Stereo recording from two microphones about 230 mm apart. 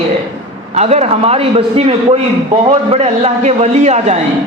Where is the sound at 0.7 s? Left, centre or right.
Right.